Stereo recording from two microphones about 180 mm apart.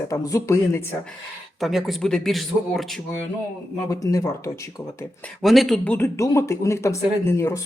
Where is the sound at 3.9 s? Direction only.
15° left (ahead or behind).